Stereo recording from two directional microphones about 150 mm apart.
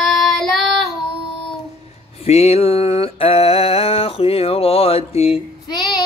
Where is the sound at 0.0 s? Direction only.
Centre (ahead or behind).